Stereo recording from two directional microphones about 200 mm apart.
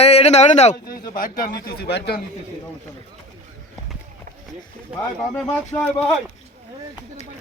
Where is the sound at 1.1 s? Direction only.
45° left (ahead or behind).